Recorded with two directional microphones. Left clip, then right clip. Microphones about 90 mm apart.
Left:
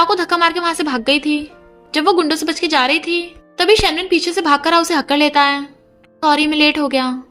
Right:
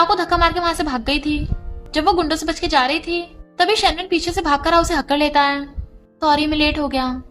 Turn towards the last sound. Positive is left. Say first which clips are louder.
# left 4 dB
turn(degrees=35)  # may be behind; listen again after turning